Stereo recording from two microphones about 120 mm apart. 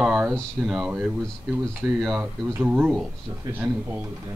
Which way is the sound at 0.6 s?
5° right (ahead or behind).